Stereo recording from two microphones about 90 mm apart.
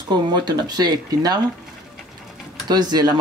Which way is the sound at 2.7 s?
50° right (ahead or behind).